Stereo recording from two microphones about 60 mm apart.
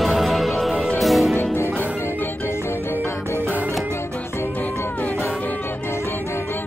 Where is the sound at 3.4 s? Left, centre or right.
Right.